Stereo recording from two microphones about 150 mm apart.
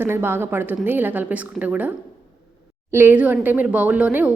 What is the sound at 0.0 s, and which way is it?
Speech, 15° right (ahead or behind).